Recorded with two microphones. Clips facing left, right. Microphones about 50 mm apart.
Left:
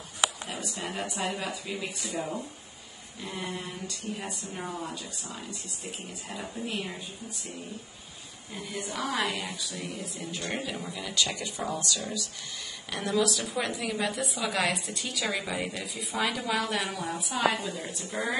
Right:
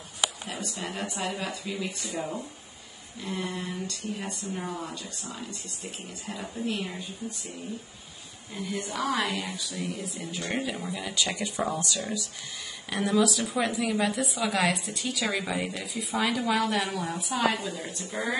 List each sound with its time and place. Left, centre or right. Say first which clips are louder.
0.2 s a woman's voice: left 1 dB; centre
8.5 s a woman's voice: right 3 dB; centre
11.2 s speech: right 4 dB; right
11.6 s speech: right 2 dB; centre
12.9 s a woman's voice: right 3 dB; centre